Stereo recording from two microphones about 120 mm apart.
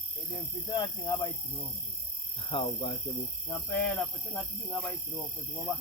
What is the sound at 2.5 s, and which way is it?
Speech, 45° left (ahead or behind).